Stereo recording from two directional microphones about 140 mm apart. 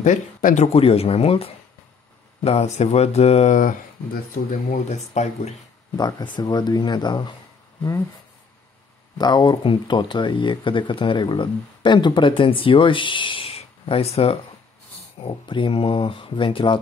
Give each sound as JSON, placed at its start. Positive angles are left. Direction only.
{"t": 0.0, "sound": "speech", "side_deg": 65}
{"t": 0.7, "sound": "speech", "side_deg": 45}
{"t": 5.9, "sound": "speech", "side_deg": 30}
{"t": 9.2, "sound": "speech", "side_deg": 30}